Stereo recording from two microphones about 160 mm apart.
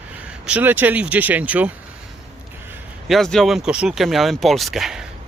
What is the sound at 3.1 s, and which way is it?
Speech, 5° left (ahead or behind).